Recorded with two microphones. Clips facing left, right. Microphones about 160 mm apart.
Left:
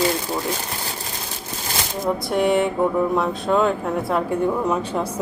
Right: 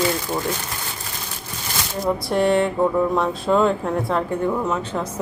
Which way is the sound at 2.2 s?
Centre (ahead or behind).